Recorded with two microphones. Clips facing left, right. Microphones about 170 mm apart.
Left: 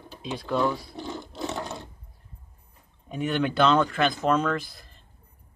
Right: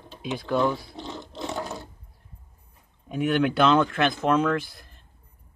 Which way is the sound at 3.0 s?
5° right (ahead or behind).